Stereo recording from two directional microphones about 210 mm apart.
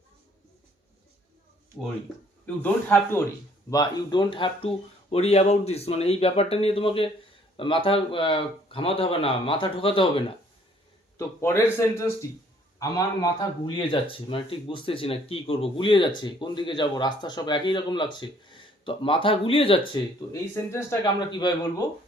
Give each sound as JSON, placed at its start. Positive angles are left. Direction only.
{"t": 2.6, "sound": "a man's voice", "side_deg": 10}
{"t": 11.2, "sound": "a man's voice", "side_deg": 15}